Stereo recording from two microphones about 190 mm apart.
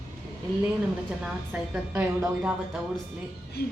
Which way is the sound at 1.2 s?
10° right (ahead or behind).